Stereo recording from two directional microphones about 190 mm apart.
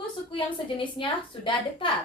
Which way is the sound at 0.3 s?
25° left (ahead or behind).